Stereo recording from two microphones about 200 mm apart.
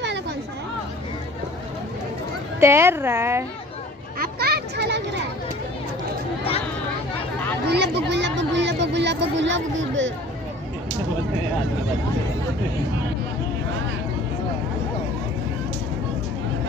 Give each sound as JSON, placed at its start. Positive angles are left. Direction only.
{"t": 2.6, "sound": "a woman's voice", "side_deg": -15}
{"t": 4.2, "sound": "children playing", "side_deg": -50}
{"t": 7.7, "sound": "a sound", "side_deg": -60}